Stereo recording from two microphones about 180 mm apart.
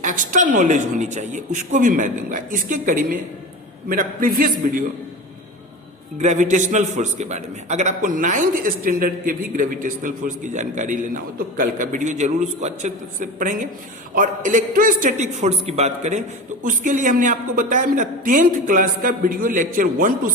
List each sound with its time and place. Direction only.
0.0 s a man's voice: 45° right (ahead or behind)
6.2 s a man's voice: 45° right (ahead or behind)